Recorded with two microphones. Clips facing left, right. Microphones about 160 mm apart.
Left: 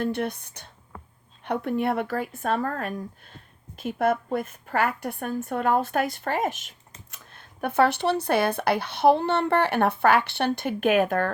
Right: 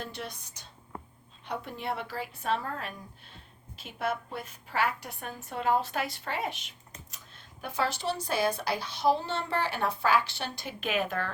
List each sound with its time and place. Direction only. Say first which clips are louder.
0.0 s a woman's voice: left 12 dB; 55° left (ahead or behind)